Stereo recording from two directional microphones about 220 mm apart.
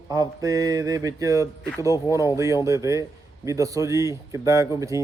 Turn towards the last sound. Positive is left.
turn(degrees=-15)  # may be behind; listen again after turning